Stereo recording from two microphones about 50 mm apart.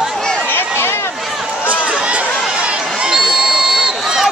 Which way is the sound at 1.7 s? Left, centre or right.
Centre.